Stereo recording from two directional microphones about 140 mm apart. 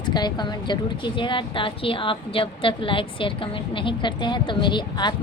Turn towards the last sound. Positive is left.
turn(degrees=35)  # may be behind; listen again after turning